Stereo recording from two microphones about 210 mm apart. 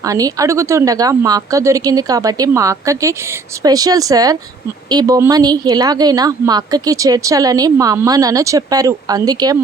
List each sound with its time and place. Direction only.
0.0 s a woman's voice: 15° right (ahead or behind)